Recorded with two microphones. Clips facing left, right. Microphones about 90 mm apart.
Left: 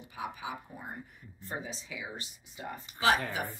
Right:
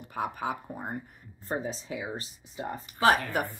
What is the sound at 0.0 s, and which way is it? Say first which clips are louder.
Speech: right 7 dB; 55° right (ahead or behind).